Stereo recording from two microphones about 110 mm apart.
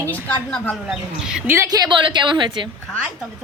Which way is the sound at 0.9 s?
5° right (ahead or behind).